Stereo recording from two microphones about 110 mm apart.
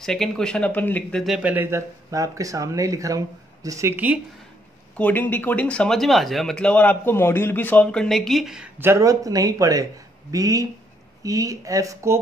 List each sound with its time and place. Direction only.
0.0 s speech: 5° left (ahead or behind)
1.4 s speech: 15° right (ahead or behind)
2.0 s speech: 30° right (ahead or behind)
3.9 s speech: 15° right (ahead or behind)
4.9 s speech: 15° left (ahead or behind); by 8.6 s centre (ahead or behind)
8.7 s speech: 25° right (ahead or behind)